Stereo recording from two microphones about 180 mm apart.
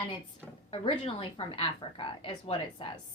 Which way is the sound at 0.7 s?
30° left (ahead or behind).